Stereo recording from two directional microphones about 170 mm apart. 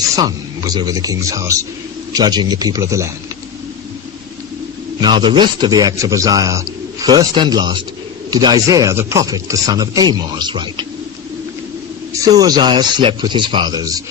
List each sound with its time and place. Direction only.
0.2 s a man's voice: 20° right (ahead or behind)
4.9 s a man's voice: 25° right (ahead or behind)
12.2 s a man's voice: 20° right (ahead or behind)